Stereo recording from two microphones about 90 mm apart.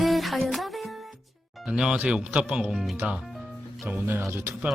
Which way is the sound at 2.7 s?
Centre (ahead or behind).